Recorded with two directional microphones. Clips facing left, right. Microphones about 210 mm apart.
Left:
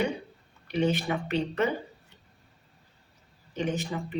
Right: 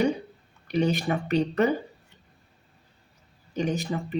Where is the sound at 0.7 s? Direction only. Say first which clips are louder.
Right 2 dB; 40° right (ahead or behind).